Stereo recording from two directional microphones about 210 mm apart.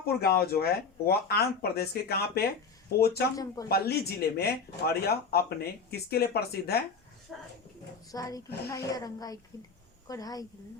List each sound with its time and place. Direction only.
0.2 s speech: 45° left (ahead or behind)
3.3 s a woman's voice: 15° left (ahead or behind)
3.7 s speech: 50° left (ahead or behind)
7.3 s speech: centre (ahead or behind)
8.1 s a woman's voice: 15° left (ahead or behind)